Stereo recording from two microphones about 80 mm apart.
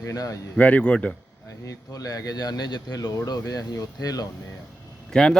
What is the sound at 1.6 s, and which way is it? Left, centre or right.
Speech, left.